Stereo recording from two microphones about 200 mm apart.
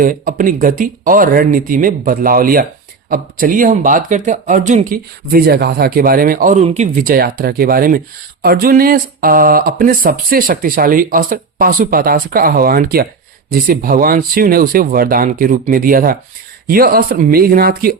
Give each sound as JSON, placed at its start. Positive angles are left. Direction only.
{"t": 0.0, "sound": "speech", "side_deg": -45}